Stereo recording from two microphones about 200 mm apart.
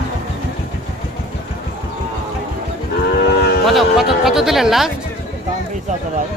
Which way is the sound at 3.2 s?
55° left (ahead or behind).